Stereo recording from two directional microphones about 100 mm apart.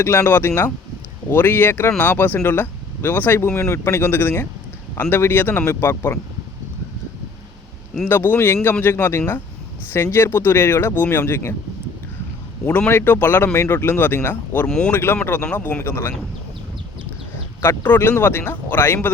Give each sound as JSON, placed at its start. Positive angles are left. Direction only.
{"t": 0.0, "sound": "speech", "side_deg": 25}
{"t": 8.0, "sound": "speech", "side_deg": 20}
{"t": 12.6, "sound": "speech", "side_deg": 20}
{"t": 14.7, "sound": "speech", "side_deg": 5}
{"t": 14.9, "sound": "speech", "side_deg": 25}
{"t": 17.6, "sound": "speech", "side_deg": 20}